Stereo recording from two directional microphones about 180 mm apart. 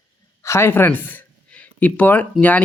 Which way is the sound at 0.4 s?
15° left (ahead or behind).